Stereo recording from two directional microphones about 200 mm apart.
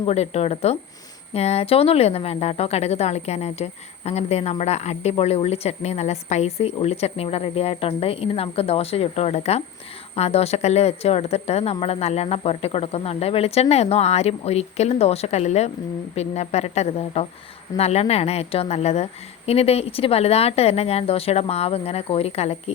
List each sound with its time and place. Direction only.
0.0 s speech: 30° left (ahead or behind)